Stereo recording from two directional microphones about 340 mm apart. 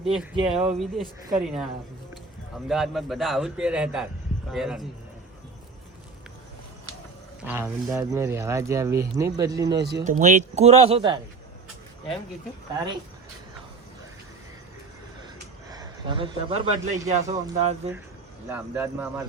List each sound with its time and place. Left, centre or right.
0.0 s a man's voice: centre
7.4 s speech: centre
9.8 s speech: right
15.7 s a man's voice: centre
18.4 s a man's voice: centre